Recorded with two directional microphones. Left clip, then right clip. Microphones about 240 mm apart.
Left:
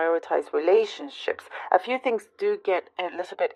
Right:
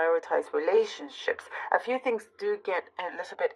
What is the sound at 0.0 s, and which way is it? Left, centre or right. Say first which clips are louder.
Speech: left 2 dB; left.